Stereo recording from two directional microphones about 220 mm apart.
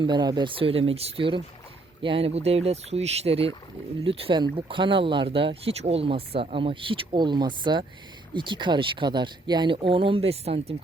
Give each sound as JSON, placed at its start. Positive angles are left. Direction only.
{"t": 0.0, "sound": "speech", "side_deg": -20}